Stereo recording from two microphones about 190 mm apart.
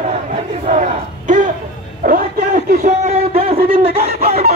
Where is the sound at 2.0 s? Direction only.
45° right (ahead or behind); by 4.1 s 30° right (ahead or behind).